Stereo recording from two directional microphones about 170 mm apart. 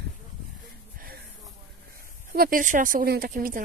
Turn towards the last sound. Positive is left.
turn(degrees=-55)  # may be behind; listen again after turning